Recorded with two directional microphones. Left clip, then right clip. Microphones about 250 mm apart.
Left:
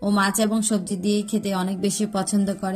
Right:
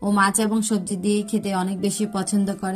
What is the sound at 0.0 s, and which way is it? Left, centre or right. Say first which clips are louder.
Speech: right 2 dB; centre.